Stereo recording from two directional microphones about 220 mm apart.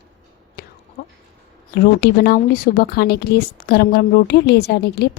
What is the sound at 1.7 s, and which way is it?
A woman's voice, 45° left (ahead or behind).